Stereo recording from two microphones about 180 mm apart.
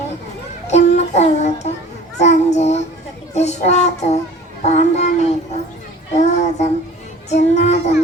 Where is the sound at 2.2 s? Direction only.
40° left (ahead or behind).